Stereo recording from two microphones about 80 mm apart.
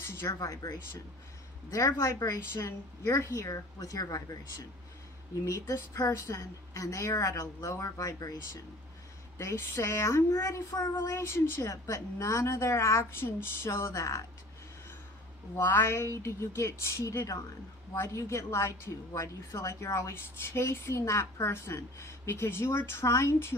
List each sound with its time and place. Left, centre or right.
0.0 s speech: left
0.4 s a woman's voice: left
2.5 s a woman's voice: left
5.4 s a woman's voice: left
9.4 s a woman's voice: left
11.1 s a woman's voice: left
15.5 s a woman's voice: left